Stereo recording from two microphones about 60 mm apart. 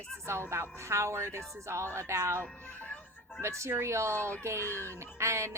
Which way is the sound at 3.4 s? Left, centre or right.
Right.